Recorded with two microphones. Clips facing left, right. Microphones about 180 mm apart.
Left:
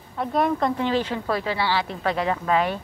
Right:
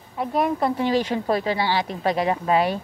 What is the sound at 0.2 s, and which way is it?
A woman's voice, 10° right (ahead or behind).